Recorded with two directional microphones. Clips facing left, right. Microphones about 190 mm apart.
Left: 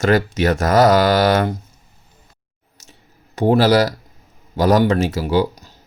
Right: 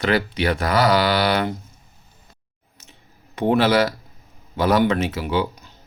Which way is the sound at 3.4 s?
40° left (ahead or behind).